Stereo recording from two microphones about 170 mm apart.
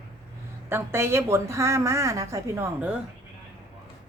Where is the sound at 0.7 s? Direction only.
15° right (ahead or behind).